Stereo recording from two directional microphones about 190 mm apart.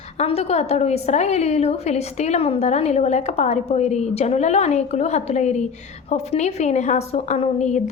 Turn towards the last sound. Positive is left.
turn(degrees=35)  # may be behind; listen again after turning